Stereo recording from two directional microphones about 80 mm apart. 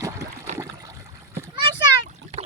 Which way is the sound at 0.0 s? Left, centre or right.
Right.